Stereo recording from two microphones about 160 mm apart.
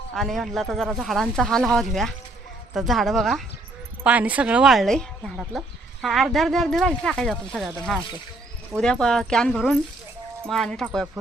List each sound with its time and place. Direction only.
0.1 s a woman's voice: centre (ahead or behind)